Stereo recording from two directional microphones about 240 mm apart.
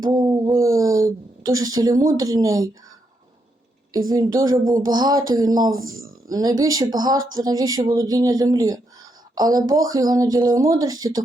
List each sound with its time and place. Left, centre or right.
0.0 s a woman's voice: centre
4.1 s speech: centre